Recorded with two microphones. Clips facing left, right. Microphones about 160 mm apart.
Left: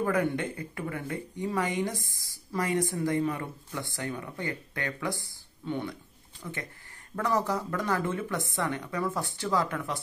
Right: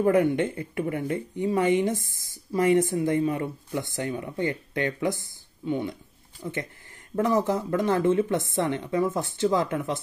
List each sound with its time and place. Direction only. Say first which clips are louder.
0.0 s speech: right 7 dB; 20° right (ahead or behind)
6.4 s speech: right 6 dB; 35° right (ahead or behind)
7.2 s speech: right 5 dB; 20° right (ahead or behind)